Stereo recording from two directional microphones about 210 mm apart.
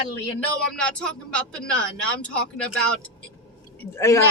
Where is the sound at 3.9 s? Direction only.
15° left (ahead or behind).